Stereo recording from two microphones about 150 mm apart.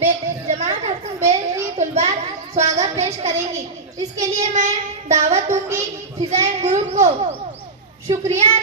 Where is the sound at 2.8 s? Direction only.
45° right (ahead or behind).